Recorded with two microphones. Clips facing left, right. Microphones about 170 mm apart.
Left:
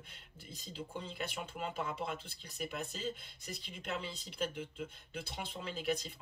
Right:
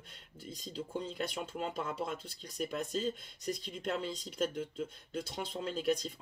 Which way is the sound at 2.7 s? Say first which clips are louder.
Right 6 dB; 45° right (ahead or behind).